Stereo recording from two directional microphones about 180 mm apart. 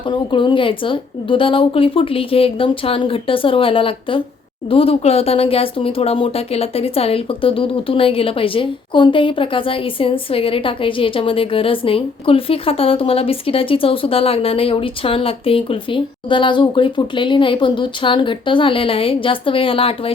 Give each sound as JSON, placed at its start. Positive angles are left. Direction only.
{"t": 0.1, "sound": "speech", "side_deg": 25}